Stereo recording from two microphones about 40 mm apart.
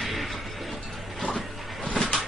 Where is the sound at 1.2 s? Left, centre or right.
Left.